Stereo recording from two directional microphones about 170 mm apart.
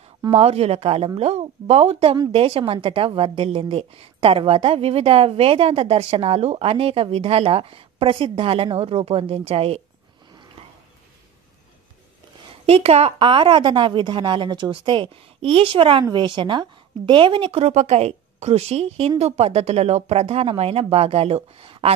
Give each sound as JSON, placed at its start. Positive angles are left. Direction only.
{"t": 0.3, "sound": "speech", "side_deg": -35}
{"t": 12.4, "sound": "speech", "side_deg": -35}